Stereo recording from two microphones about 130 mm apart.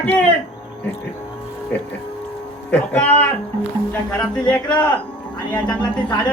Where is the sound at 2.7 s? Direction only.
10° left (ahead or behind).